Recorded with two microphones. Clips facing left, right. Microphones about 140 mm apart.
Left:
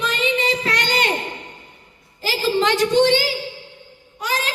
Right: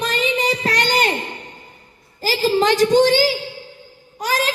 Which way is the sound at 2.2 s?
40° right (ahead or behind).